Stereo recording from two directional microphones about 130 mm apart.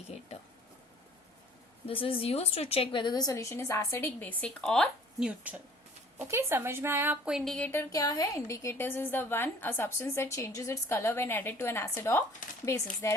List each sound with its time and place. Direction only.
1.9 s a woman's voice: 45° left (ahead or behind); by 5.3 s 5° left (ahead or behind)
6.1 s a woman's voice: 20° right (ahead or behind)
7.3 s speech: centre (ahead or behind)
7.7 s a woman's voice: 25° left (ahead or behind)